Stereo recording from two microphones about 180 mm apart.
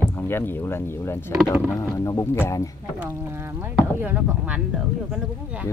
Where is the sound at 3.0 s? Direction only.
15° right (ahead or behind).